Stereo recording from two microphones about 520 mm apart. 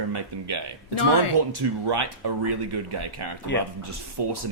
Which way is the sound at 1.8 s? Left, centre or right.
Right.